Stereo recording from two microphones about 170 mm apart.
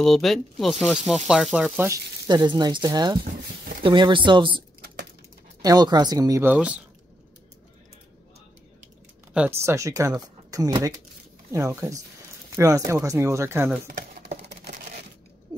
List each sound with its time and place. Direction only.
0.0 s speech: centre (ahead or behind)
2.2 s speech: 25° right (ahead or behind)
6.5 s speech: 5° right (ahead or behind)
9.3 s speech: 10° right (ahead or behind)
13.8 s typing: 65° right (ahead or behind)